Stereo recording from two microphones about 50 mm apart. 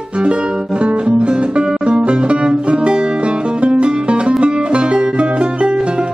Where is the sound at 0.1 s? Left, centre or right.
Centre.